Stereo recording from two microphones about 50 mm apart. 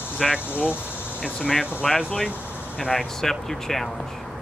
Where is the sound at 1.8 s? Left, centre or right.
Centre.